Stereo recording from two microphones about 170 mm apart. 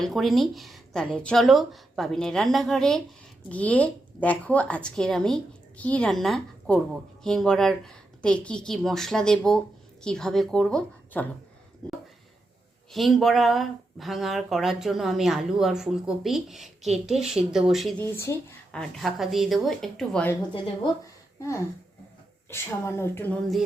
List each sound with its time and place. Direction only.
0.0 s speech: centre (ahead or behind)
12.9 s speech: centre (ahead or behind)
18.0 s speech: 15° left (ahead or behind)
18.8 s speech: centre (ahead or behind)
20.5 s a woman's voice: 25° left (ahead or behind)